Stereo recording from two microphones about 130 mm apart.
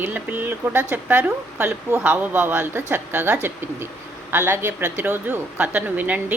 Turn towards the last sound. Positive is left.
turn(degrees=-15)  # may be behind; listen again after turning